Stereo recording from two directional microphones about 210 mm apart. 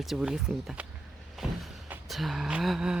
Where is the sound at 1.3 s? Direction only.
5° right (ahead or behind).